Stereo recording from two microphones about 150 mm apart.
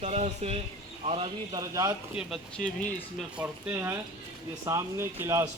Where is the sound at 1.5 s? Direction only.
25° right (ahead or behind).